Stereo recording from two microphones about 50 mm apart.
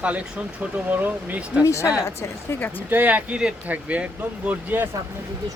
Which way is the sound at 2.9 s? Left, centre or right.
Right.